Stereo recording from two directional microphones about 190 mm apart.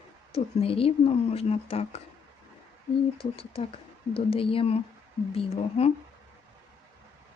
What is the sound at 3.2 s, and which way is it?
Speech, 30° left (ahead or behind).